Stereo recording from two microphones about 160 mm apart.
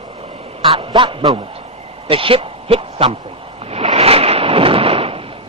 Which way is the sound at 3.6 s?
40° right (ahead or behind).